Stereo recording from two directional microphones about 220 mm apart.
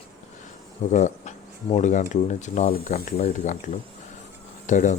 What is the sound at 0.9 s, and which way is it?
Speech, 35° left (ahead or behind).